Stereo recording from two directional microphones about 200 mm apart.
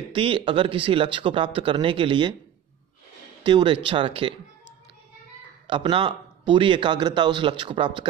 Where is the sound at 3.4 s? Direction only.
25° right (ahead or behind).